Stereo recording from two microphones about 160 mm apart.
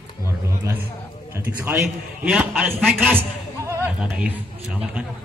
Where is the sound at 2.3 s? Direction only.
5° right (ahead or behind).